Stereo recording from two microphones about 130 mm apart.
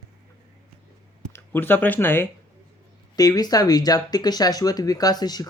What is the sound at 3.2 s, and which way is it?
Speech, 30° left (ahead or behind).